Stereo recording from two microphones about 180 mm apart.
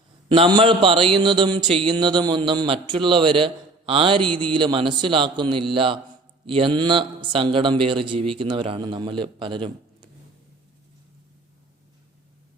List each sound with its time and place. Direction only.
0.3 s speech: 25° right (ahead or behind)